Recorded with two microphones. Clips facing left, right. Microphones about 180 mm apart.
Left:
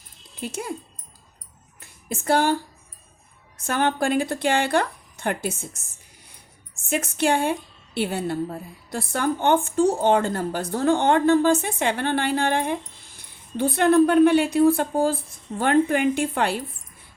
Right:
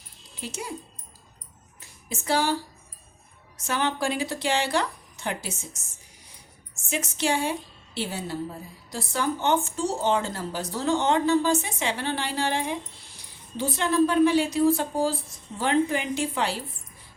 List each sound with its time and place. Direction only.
0.3 s speech: 55° left (ahead or behind)
1.8 s a sound: 55° left (ahead or behind)
3.6 s a woman's voice: 55° left (ahead or behind)
6.8 s a woman's voice: 55° left (ahead or behind)